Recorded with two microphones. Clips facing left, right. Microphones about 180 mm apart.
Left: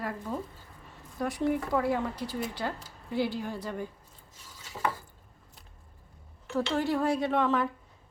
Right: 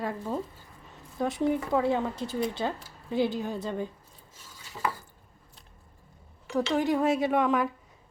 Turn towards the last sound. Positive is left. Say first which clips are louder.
# right 2 dB
turn(degrees=-15)  # may be behind; listen again after turning